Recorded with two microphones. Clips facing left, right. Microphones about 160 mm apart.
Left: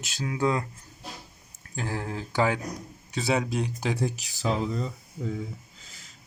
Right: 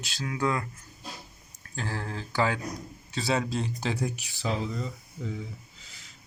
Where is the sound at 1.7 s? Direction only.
15° left (ahead or behind).